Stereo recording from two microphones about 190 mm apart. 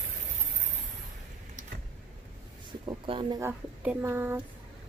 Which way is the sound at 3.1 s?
30° right (ahead or behind).